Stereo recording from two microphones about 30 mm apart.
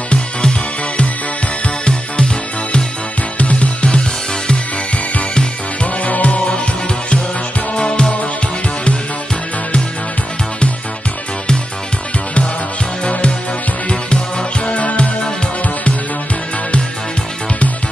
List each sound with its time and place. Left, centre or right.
1.9 s music: left
3.3 s music: left
6.0 s music: left
7.7 s music: left
13.8 s music: left
14.8 s music: left